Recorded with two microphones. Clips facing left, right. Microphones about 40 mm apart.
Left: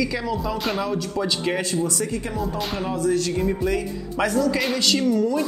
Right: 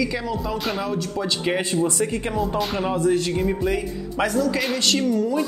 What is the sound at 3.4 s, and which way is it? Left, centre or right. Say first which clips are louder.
Speech: even; centre.